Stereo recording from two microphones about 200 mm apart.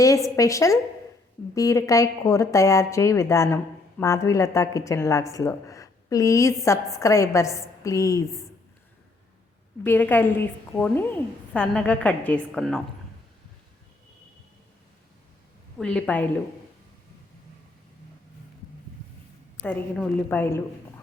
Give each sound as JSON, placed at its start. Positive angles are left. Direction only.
{"t": 0.0, "sound": "a woman's voice", "side_deg": 15}
{"t": 9.8, "sound": "a woman's voice", "side_deg": 10}
{"t": 15.8, "sound": "a woman's voice", "side_deg": 5}
{"t": 19.6, "sound": "a woman's voice", "side_deg": 5}